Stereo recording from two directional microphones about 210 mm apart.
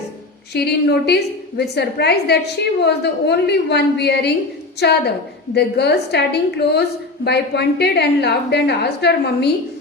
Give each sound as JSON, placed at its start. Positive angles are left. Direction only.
{"t": 0.5, "sound": "a woman's voice", "side_deg": 50}